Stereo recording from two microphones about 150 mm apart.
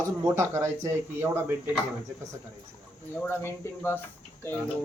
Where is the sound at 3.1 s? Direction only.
15° left (ahead or behind).